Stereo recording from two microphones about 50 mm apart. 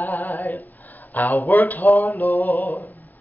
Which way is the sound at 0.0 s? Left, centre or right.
Left.